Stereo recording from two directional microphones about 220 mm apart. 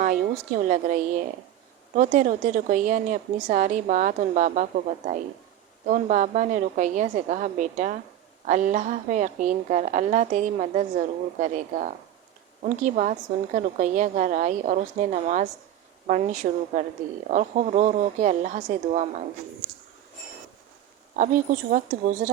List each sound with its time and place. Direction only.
0.7 s a woman's voice: 35° right (ahead or behind)
21.2 s a woman's voice: 35° right (ahead or behind)